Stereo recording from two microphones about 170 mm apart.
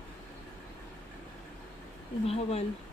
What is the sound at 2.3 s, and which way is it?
Speech, 35° left (ahead or behind).